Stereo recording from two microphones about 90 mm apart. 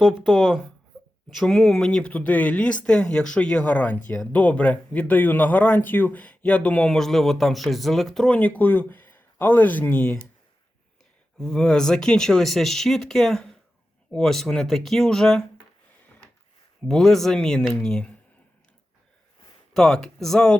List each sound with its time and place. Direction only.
0.0 s speech: centre (ahead or behind); by 6.9 s 15° left (ahead or behind)
6.9 s speech: 5° left (ahead or behind)
8.4 s speech: 20° left (ahead or behind)
11.3 s speech: 5° left (ahead or behind)
16.9 s speech: 5° left (ahead or behind)
19.7 s speech: 5° left (ahead or behind)